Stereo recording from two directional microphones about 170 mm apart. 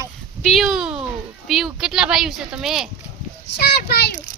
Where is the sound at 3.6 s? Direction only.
65° left (ahead or behind).